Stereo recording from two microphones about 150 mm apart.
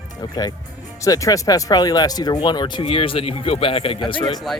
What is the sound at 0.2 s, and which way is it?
Speech, 25° left (ahead or behind).